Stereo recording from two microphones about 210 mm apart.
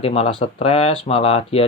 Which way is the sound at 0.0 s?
30° left (ahead or behind).